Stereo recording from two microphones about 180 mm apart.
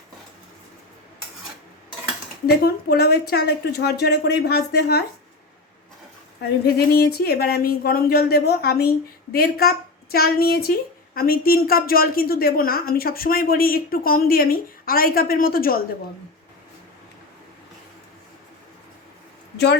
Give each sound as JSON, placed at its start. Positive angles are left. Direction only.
{"t": 2.6, "sound": "a woman's voice", "side_deg": 60}
{"t": 6.7, "sound": "a woman's voice", "side_deg": 60}
{"t": 19.5, "sound": "speech", "side_deg": 70}